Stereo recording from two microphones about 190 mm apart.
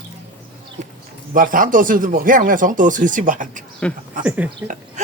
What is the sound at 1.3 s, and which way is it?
Speech, 45° right (ahead or behind).